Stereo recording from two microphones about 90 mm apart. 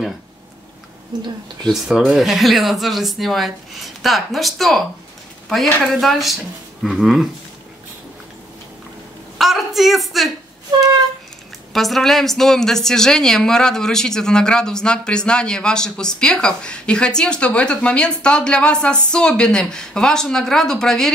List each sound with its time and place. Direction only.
1.1 s speech: 50° right (ahead or behind)
1.7 s speech: centre (ahead or behind)
9.4 s speech: 5° right (ahead or behind)
11.7 s a woman's voice: centre (ahead or behind)